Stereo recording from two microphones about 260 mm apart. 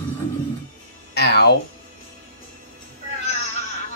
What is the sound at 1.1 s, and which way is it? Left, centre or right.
Music, left.